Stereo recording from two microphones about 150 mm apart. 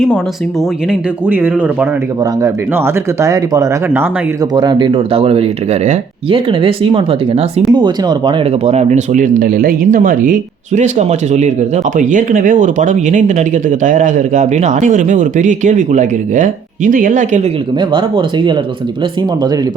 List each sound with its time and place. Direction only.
0.9 s speech: 10° right (ahead or behind); by 6.4 s 45° right (ahead or behind)
6.5 s speech: 35° right (ahead or behind)
8.6 s speech: 45° right (ahead or behind)
11.9 s speech: 60° right (ahead or behind)
17.7 s speech: 30° right (ahead or behind)